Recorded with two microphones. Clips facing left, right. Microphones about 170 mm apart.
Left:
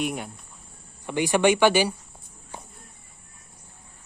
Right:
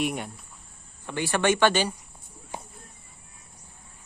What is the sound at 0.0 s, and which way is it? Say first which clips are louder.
Speech: even; centre (ahead or behind).